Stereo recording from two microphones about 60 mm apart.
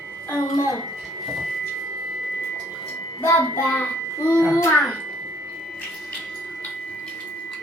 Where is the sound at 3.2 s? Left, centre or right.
Left.